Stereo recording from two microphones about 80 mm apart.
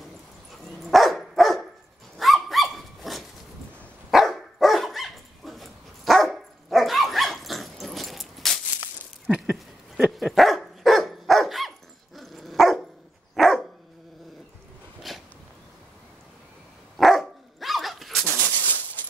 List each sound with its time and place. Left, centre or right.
0.8 s dog: centre
8.8 s whip: centre
10.1 s dog: centre
15.1 s a sound: centre
17.0 s dog: centre
18.3 s a sound: centre